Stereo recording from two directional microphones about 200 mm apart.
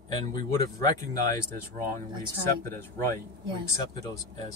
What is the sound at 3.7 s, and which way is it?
Speech, 15° left (ahead or behind).